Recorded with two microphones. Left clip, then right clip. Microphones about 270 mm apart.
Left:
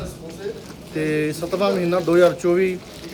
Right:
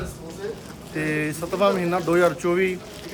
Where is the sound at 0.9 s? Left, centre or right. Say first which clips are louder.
Left 3 dB; centre.